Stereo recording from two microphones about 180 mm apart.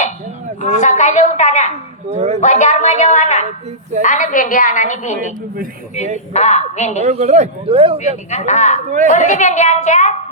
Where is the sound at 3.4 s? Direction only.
40° right (ahead or behind).